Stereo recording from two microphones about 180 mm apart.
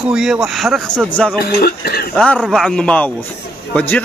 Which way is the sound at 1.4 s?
60° left (ahead or behind).